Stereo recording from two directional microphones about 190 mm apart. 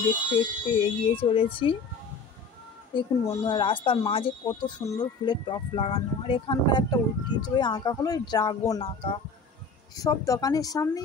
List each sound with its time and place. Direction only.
0.3 s speech: 30° left (ahead or behind)
2.9 s speech: 25° left (ahead or behind)